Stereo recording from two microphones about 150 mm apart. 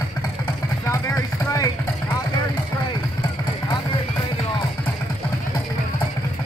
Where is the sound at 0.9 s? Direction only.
20° left (ahead or behind).